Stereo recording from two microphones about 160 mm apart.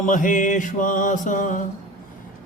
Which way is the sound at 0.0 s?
55° left (ahead or behind).